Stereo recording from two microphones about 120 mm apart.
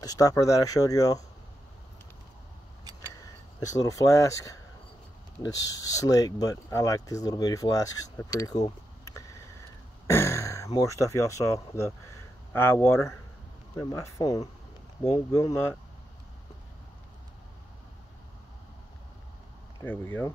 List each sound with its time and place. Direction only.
0.0 s speech: 30° left (ahead or behind)
3.5 s speech: 30° left (ahead or behind)
8.5 s a sound: 30° left (ahead or behind)
10.0 s speech: 20° left (ahead or behind)
19.8 s speech: 15° left (ahead or behind)